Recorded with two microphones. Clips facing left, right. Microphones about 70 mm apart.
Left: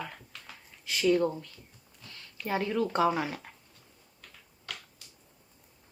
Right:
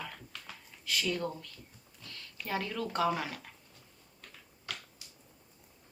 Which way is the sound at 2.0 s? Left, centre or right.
Left.